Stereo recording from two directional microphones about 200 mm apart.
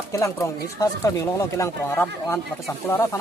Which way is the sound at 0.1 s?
15° left (ahead or behind).